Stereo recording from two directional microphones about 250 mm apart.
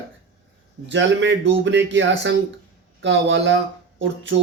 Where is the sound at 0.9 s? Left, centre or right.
Right.